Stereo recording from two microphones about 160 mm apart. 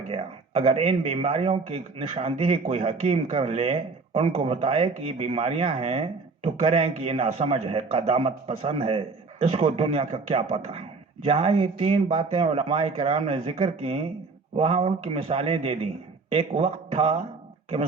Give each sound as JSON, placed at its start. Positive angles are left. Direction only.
{"t": 0.1, "sound": "a man's voice", "side_deg": -35}